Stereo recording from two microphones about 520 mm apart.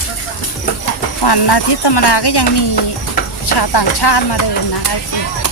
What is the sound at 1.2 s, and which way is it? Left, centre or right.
Speech, left.